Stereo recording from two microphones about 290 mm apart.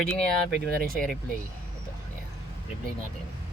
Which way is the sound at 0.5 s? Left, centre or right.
Right.